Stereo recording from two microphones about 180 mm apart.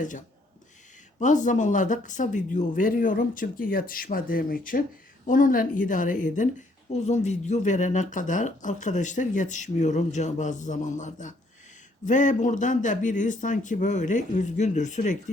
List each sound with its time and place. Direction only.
1.2 s speech: 45° left (ahead or behind)